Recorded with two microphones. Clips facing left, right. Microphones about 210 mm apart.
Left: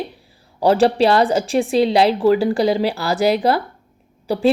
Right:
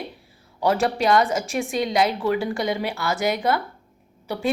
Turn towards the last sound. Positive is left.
turn(degrees=30)  # may be behind; listen again after turning